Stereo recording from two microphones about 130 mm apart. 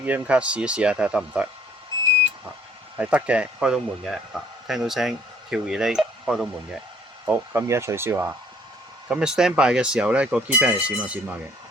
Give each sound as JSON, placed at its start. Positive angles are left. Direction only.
{"t": 0.0, "sound": "speech", "side_deg": -10}
{"t": 3.0, "sound": "speech", "side_deg": -10}
{"t": 7.3, "sound": "speech", "side_deg": -20}
{"t": 9.0, "sound": "speech", "side_deg": -5}